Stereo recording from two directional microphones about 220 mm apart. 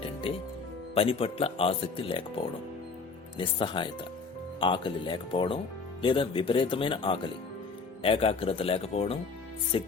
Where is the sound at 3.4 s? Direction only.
25° left (ahead or behind).